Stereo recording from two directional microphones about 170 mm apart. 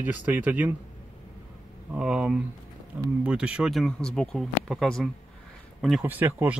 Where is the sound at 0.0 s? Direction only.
10° right (ahead or behind).